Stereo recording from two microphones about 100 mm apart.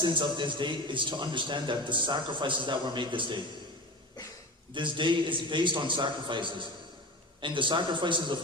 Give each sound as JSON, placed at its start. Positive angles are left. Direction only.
{"t": 0.0, "sound": "a man's voice", "side_deg": -50}
{"t": 4.7, "sound": "a man's voice", "side_deg": -55}